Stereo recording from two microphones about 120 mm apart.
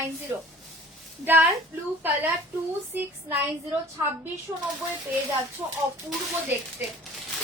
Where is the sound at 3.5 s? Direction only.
25° right (ahead or behind).